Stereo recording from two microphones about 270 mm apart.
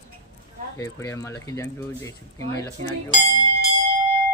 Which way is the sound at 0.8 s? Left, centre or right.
Centre.